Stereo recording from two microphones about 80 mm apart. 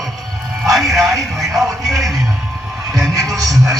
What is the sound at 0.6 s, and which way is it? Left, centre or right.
Music, centre.